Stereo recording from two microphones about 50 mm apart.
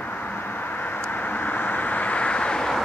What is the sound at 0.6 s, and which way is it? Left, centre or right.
Vehicle, left.